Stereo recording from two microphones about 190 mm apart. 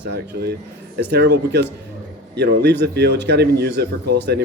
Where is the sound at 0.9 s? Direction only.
60° right (ahead or behind).